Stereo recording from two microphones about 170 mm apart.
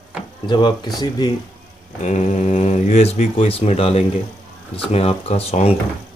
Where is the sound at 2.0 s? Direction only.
45° left (ahead or behind).